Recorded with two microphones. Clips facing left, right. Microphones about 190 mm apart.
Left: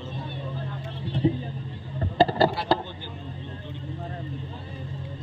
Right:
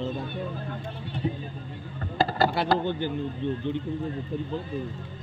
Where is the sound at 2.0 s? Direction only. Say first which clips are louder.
Left 4 dB; 30° left (ahead or behind).